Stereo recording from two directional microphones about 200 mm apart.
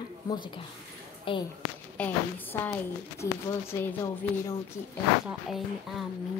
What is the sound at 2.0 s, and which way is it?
A woman's voice, 10° left (ahead or behind).